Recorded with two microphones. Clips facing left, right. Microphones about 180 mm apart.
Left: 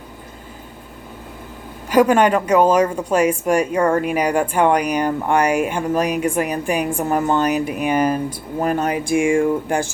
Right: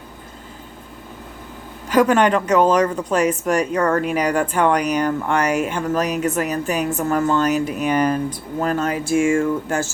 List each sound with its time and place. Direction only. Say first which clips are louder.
1.9 s a woman's voice: left 1 dB; 10° left (ahead or behind)